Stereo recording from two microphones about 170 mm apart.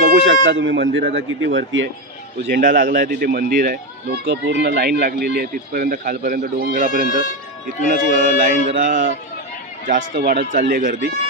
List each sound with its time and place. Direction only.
0.1 s speech: 90° right
2.6 s a man's voice: 50° right (ahead or behind)
9.9 s a man's voice: 80° right; by 11.0 s 55° right (ahead or behind)